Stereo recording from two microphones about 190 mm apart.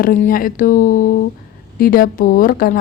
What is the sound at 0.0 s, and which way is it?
A woman's voice, 45° left (ahead or behind).